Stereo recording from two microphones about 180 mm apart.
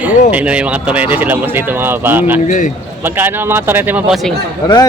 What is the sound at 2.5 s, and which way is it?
Speech, 45° left (ahead or behind).